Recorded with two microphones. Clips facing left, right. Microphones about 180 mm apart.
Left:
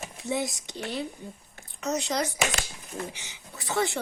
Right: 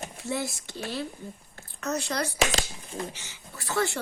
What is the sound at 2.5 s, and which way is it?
Speech, 30° right (ahead or behind).